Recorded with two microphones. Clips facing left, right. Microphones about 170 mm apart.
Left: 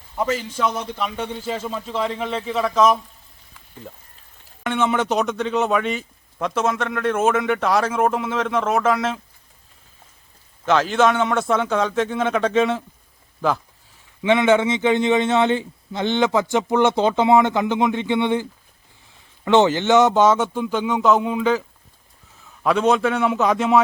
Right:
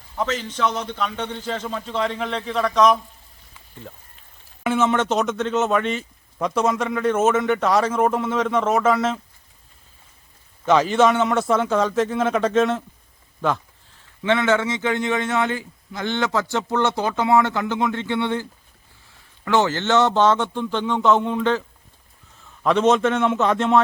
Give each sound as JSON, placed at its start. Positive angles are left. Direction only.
{"t": 0.2, "sound": "a man's voice", "side_deg": 10}
{"t": 4.6, "sound": "speech", "side_deg": 0}
{"t": 10.7, "sound": "speech", "side_deg": -5}
{"t": 14.2, "sound": "a man's voice", "side_deg": 15}
{"t": 19.5, "sound": "a man's voice", "side_deg": 20}
{"t": 22.6, "sound": "speech", "side_deg": 5}